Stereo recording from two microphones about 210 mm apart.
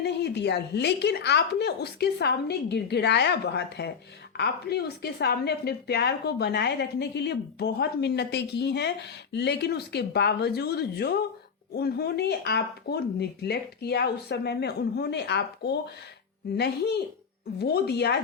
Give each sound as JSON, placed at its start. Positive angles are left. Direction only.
{"t": 0.0, "sound": "a woman's voice", "side_deg": 50}